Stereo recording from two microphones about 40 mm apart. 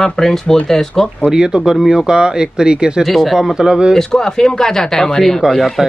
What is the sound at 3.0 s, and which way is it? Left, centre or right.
Speech, centre.